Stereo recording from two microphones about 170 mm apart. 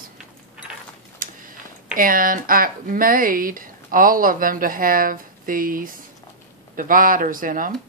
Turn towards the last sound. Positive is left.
turn(degrees=-55)  # may be behind; listen again after turning